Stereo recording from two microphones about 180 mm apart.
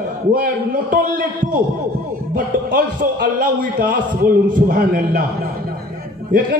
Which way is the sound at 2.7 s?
50° right (ahead or behind).